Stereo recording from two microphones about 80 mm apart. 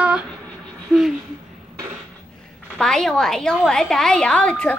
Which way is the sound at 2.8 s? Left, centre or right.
Centre.